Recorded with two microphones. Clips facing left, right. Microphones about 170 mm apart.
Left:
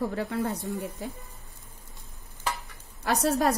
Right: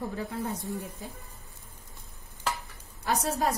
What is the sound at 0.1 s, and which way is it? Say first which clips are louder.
Speech: left 4 dB; 70° left (ahead or behind).